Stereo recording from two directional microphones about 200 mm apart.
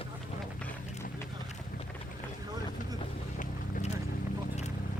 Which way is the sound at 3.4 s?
40° left (ahead or behind).